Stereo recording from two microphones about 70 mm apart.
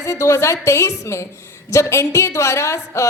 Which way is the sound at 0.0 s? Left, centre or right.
Left.